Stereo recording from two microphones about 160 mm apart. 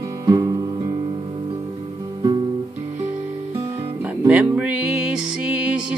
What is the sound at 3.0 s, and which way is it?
Music, 10° right (ahead or behind).